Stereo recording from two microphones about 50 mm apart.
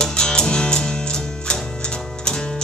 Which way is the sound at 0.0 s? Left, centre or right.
Centre.